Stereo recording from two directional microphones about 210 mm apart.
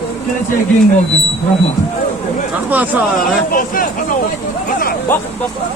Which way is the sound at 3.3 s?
40° left (ahead or behind).